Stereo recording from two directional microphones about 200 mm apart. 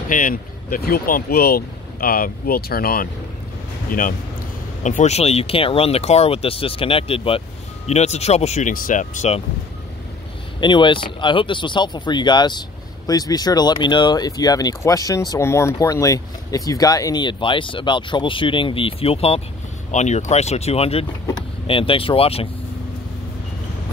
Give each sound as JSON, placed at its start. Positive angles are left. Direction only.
{"t": 0.1, "sound": "speech", "side_deg": 45}
{"t": 4.8, "sound": "speech", "side_deg": 35}
{"t": 10.6, "sound": "speech", "side_deg": 25}